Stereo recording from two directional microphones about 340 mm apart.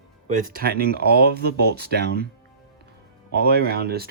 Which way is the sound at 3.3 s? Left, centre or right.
Right.